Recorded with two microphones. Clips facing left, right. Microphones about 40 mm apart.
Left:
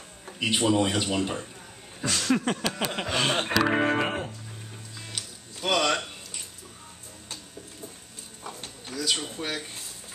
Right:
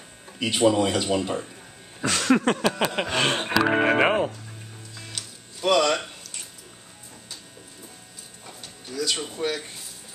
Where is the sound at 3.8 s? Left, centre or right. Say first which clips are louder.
Right 6 dB; right.